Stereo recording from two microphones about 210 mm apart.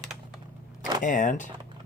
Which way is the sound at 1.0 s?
40° left (ahead or behind).